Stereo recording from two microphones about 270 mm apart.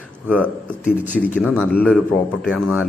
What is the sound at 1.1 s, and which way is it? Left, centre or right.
Speech, centre.